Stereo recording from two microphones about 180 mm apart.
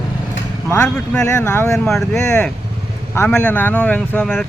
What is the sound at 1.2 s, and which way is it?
Speech, 15° left (ahead or behind).